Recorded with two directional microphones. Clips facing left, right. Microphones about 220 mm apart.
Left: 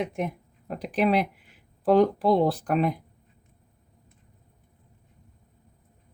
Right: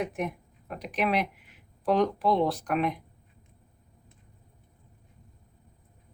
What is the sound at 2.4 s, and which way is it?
Speech, 35° left (ahead or behind).